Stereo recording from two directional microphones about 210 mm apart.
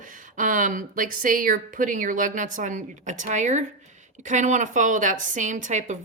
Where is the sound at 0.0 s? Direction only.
40° right (ahead or behind).